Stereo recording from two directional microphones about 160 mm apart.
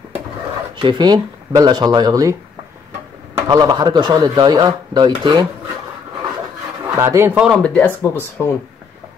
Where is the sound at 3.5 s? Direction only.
25° right (ahead or behind).